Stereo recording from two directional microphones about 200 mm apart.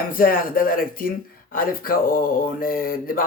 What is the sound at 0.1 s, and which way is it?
Speech, 45° left (ahead or behind).